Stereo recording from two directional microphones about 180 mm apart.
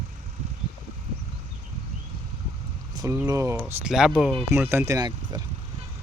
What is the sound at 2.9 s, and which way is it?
Vehicle, 20° right (ahead or behind).